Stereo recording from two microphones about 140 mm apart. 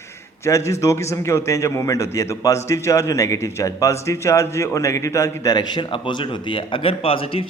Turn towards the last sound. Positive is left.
turn(degrees=40)  # may be behind; listen again after turning